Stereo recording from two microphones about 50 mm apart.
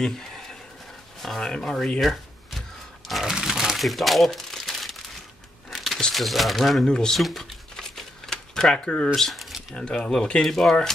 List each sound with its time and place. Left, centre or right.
0.0 s a sound: centre
1.2 s speech: centre
2.0 s a sound: centre
4.3 s crumpling: centre
6.1 s speech: centre
6.8 s speech: centre
7.2 s speech: centre
7.7 s typewriter: centre
9.8 s speech: centre